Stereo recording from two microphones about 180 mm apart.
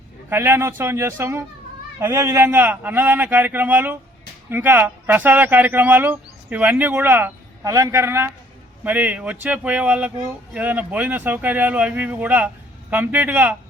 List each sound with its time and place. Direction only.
0.3 s speech: 15° right (ahead or behind)